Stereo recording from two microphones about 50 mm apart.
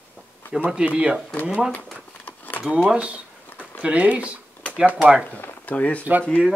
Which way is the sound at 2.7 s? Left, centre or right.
Right.